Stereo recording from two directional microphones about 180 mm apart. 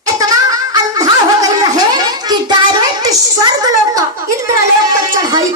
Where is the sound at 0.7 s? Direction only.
20° right (ahead or behind).